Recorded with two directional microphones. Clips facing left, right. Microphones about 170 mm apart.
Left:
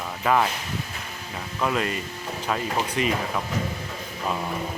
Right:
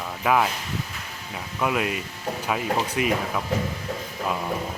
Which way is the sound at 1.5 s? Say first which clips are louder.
Right 1 dB; 10° right (ahead or behind).